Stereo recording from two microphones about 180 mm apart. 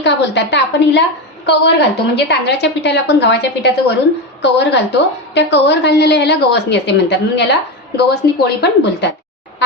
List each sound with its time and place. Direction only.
0.0 s a woman's voice: 75° left (ahead or behind)